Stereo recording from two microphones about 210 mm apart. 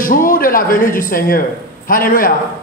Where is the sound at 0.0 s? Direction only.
40° left (ahead or behind).